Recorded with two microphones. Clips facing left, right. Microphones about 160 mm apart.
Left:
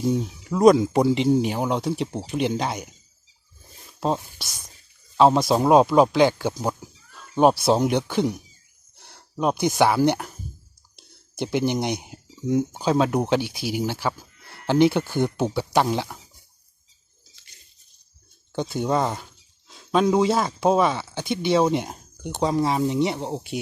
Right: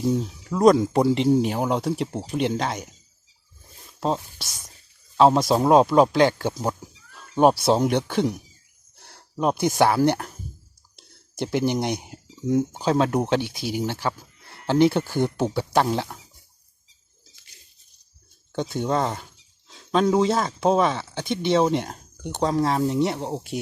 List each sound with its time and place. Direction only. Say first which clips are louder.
0.0 s speech: even; centre (ahead or behind)
4.0 s speech: even; 5° left (ahead or behind)
18.5 s speech: left 1 dB; 5° left (ahead or behind)